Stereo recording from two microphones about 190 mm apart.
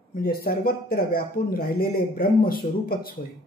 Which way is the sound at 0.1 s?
50° left (ahead or behind).